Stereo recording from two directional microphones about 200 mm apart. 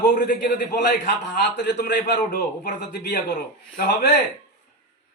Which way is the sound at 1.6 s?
55° left (ahead or behind).